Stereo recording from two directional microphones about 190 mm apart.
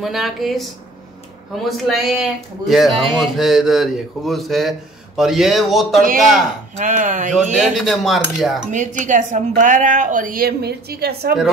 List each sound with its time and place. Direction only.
0.0 s speech: centre (ahead or behind)
1.7 s speech: centre (ahead or behind)
6.8 s speech: 40° right (ahead or behind)
7.5 s speech: centre (ahead or behind)
8.7 s a woman's voice: 40° right (ahead or behind); by 11.3 s 55° right (ahead or behind)